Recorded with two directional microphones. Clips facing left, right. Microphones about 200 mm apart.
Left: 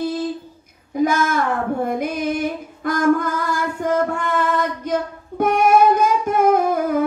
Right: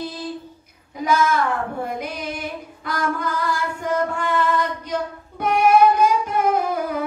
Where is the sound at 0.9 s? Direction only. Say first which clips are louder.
Left 10 dB; 50° left (ahead or behind).